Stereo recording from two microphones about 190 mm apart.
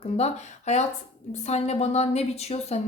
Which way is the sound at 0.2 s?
35° left (ahead or behind).